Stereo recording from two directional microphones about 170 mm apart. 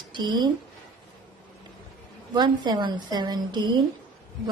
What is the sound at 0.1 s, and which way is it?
Speech, 25° right (ahead or behind).